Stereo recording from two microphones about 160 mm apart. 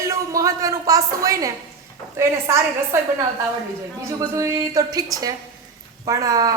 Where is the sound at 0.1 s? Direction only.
20° right (ahead or behind).